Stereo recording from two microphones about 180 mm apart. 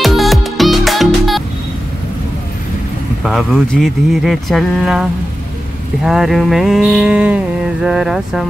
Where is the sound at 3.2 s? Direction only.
5° left (ahead or behind).